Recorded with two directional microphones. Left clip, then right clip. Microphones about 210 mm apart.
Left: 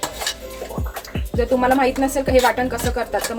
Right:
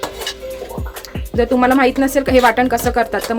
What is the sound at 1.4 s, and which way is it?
Speech, 40° right (ahead or behind).